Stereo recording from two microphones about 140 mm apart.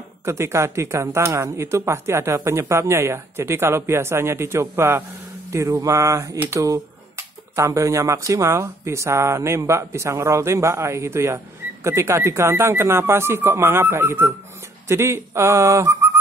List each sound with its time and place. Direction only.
0.2 s speech: 20° right (ahead or behind)